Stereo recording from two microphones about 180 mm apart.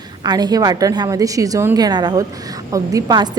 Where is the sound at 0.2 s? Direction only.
20° right (ahead or behind).